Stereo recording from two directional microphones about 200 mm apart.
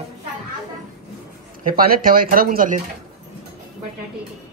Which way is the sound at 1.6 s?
45° right (ahead or behind).